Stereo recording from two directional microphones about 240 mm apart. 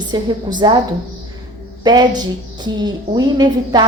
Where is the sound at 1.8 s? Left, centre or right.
Centre.